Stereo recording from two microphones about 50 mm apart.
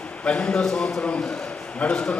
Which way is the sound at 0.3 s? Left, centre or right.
Centre.